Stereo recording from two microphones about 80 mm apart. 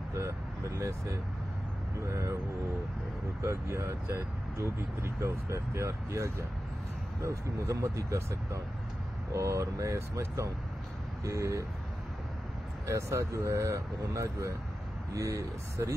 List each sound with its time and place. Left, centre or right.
0.1 s speech: right
3.4 s speech: right
12.8 s speech: right